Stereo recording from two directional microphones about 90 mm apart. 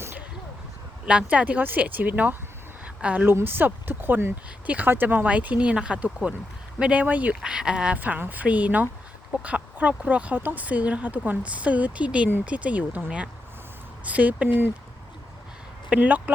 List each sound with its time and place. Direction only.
1.0 s a woman's voice: 15° right (ahead or behind)
15.9 s speech: 20° right (ahead or behind)